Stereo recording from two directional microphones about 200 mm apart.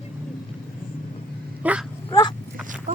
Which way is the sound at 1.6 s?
5° right (ahead or behind).